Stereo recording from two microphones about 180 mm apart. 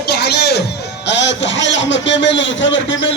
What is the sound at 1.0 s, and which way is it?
A man's voice, 80° left.